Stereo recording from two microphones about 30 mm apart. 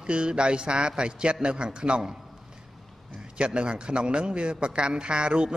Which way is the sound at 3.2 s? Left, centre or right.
Right.